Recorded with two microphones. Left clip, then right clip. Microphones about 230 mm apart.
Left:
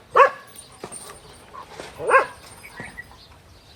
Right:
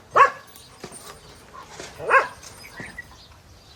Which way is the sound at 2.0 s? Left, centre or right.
Centre.